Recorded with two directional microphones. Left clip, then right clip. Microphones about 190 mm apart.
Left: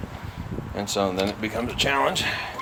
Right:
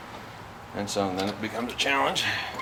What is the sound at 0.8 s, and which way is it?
Speech, 55° left (ahead or behind).